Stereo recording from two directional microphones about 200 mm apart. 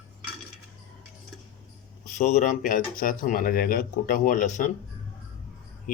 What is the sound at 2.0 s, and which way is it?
Speech, 35° left (ahead or behind).